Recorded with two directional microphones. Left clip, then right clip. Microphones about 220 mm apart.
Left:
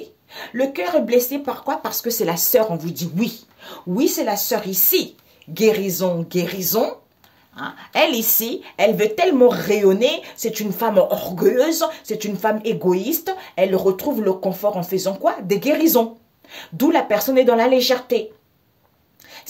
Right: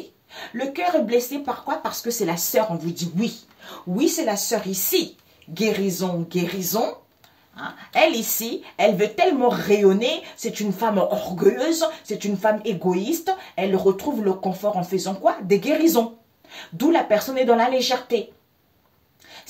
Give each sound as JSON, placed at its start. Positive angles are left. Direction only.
{"t": 0.3, "sound": "a woman's voice", "side_deg": 55}